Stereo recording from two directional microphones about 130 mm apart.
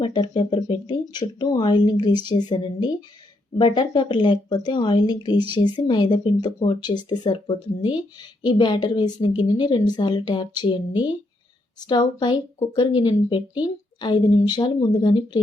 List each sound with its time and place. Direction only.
0.0 s speech: 35° left (ahead or behind)
11.8 s speech: 35° left (ahead or behind)